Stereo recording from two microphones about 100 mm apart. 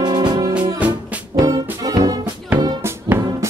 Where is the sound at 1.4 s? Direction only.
35° right (ahead or behind).